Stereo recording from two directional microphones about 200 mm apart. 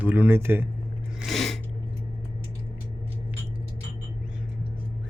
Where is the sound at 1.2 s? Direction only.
Centre (ahead or behind).